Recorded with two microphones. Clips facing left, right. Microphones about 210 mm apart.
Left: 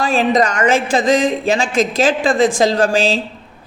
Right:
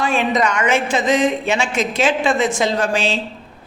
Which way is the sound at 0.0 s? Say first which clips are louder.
Left 3 dB; 35° left (ahead or behind).